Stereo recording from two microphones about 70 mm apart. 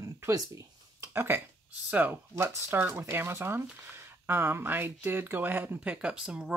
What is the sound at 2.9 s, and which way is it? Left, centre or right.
Speech, right.